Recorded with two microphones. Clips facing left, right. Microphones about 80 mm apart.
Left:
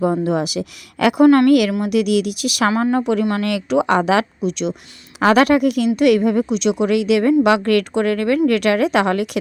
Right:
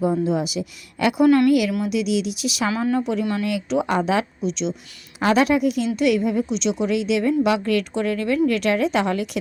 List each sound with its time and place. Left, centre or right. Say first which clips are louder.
0.0 s a woman's voice: left 3 dB; left